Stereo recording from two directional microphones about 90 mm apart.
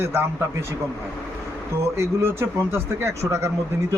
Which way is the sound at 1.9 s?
30° right (ahead or behind).